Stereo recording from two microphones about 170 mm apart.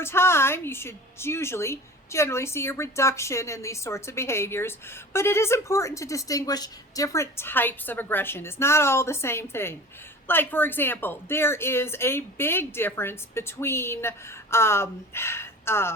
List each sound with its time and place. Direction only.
0.0 s a woman's voice: 15° left (ahead or behind)